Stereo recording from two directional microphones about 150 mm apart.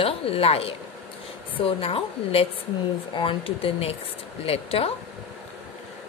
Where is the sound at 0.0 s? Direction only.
40° left (ahead or behind).